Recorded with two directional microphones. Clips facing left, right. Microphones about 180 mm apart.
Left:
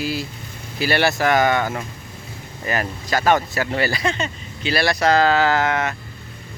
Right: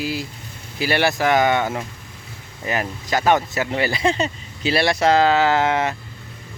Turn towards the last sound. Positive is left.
turn(degrees=-25)  # may be behind; listen again after turning